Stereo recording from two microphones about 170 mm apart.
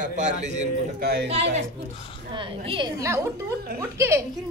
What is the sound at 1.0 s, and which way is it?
Speech, 70° right (ahead or behind).